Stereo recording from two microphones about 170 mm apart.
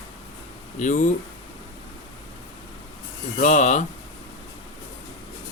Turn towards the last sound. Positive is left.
turn(degrees=45)  # may be behind; listen again after turning